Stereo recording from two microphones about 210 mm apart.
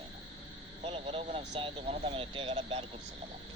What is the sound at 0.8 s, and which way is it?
A man's voice, 30° right (ahead or behind).